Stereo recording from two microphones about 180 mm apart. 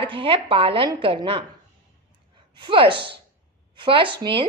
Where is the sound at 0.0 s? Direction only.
30° right (ahead or behind).